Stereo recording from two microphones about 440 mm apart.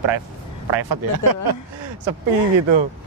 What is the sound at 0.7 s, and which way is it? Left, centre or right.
Speech, right.